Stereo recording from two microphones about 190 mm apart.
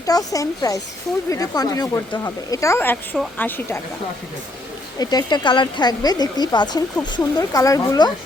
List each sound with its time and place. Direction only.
0.0 s speech: 20° left (ahead or behind)
4.9 s speech: 20° left (ahead or behind)